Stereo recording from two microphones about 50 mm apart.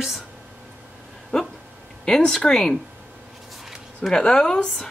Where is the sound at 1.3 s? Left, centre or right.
Centre.